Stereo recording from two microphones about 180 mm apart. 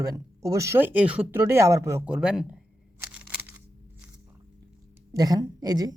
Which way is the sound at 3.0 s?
10° right (ahead or behind).